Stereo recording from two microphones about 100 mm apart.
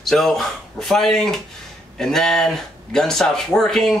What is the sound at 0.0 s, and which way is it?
Speech, 5° left (ahead or behind).